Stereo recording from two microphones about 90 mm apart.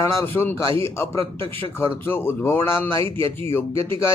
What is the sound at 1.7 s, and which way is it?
A man's voice, 25° left (ahead or behind).